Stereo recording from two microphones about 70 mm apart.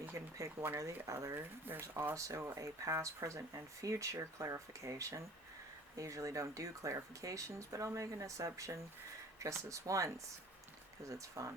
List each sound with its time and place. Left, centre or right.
0.3 s speech: right
1.4 s speech: right
1.8 s speech: right
2.1 s speech: right